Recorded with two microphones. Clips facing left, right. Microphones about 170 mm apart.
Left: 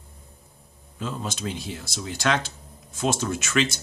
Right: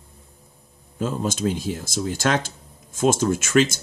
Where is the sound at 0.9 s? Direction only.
45° right (ahead or behind).